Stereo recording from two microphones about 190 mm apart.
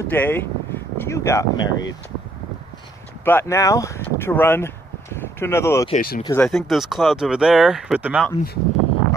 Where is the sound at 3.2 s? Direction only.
10° left (ahead or behind).